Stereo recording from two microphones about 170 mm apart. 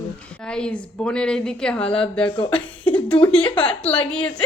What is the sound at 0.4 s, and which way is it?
A woman's voice, 5° left (ahead or behind).